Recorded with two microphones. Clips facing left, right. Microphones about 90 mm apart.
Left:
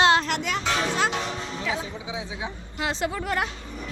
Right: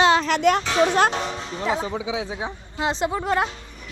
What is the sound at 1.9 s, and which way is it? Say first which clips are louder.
Speech: right 7 dB; 85° right.